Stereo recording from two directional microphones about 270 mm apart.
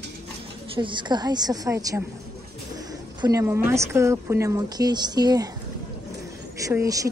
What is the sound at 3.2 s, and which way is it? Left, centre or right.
Speech, centre.